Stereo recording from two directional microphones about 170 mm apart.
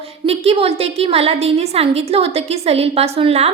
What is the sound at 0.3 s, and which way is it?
A woman's voice, 35° right (ahead or behind).